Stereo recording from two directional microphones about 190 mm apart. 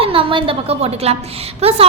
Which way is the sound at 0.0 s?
30° right (ahead or behind).